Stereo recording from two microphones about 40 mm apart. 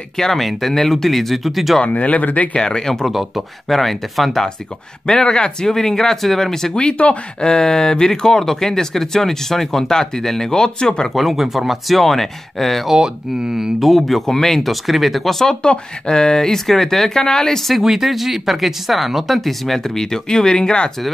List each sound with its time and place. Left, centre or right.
0.2 s speech: centre
1.9 s speech: left
2.5 s speech: left
3.1 s speech: centre
5.0 s speech: centre
6.7 s speech: left
7.4 s speech: centre
11.1 s speech: centre
12.9 s speech: centre
13.7 s speech: centre
15.6 s speech: left
17.8 s speech: centre; by 20.9 s left